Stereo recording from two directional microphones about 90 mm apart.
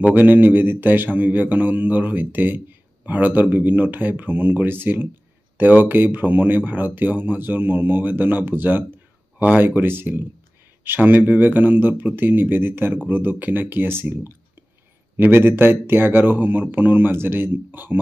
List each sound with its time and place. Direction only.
0.1 s speech: 20° right (ahead or behind)